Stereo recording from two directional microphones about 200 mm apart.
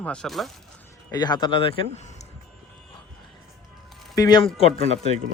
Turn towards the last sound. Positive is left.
turn(degrees=30)  # may be behind; listen again after turning